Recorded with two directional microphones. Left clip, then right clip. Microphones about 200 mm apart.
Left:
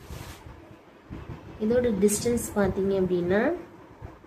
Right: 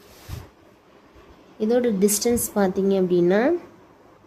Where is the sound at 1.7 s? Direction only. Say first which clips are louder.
Right 3 dB; 45° right (ahead or behind).